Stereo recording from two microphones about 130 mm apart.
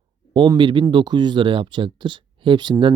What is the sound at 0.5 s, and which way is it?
Speech, 40° right (ahead or behind).